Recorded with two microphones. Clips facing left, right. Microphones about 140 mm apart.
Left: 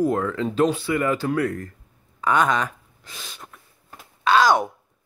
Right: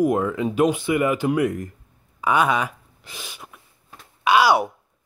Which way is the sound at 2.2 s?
10° right (ahead or behind).